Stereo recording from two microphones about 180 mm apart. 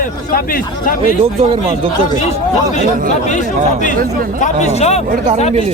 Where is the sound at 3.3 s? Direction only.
45° left (ahead or behind).